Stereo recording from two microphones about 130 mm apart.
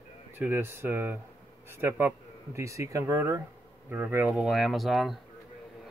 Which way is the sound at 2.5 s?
25° right (ahead or behind).